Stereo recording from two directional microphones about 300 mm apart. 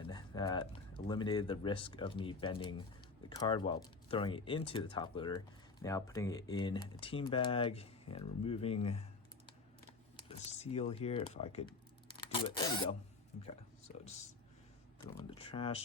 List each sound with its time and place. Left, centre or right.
0.0 s speech: centre
10.2 s speech: centre
15.2 s speech: centre